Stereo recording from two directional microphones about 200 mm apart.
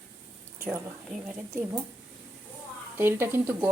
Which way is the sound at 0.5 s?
15° right (ahead or behind).